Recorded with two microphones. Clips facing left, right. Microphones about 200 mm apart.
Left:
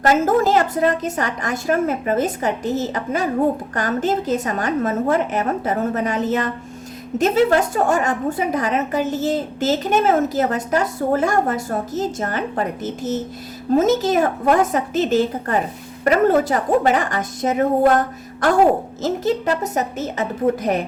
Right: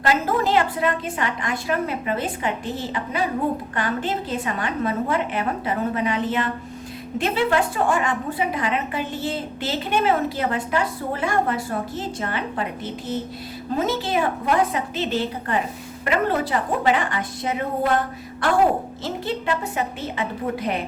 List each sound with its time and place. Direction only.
0.0 s a woman's voice: 45° left (ahead or behind)